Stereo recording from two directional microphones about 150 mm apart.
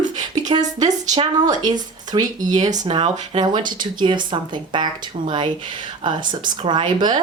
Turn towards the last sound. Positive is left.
turn(degrees=-30)  # may be behind; listen again after turning